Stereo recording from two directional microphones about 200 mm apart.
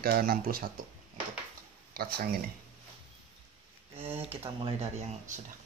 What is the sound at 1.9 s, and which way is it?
Speech, 50° right (ahead or behind).